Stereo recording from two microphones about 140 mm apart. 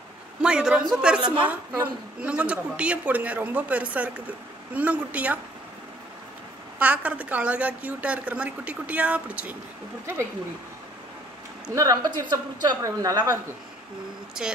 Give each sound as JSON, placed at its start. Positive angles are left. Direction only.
{"t": 0.4, "sound": "speech", "side_deg": -5}
{"t": 6.8, "sound": "speech", "side_deg": -10}
{"t": 11.7, "sound": "a woman's voice", "side_deg": -25}